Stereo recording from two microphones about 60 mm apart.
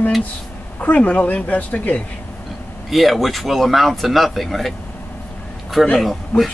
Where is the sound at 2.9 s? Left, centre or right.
Centre.